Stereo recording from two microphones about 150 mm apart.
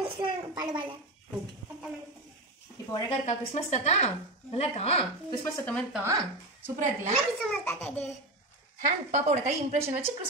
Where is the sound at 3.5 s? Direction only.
50° left (ahead or behind).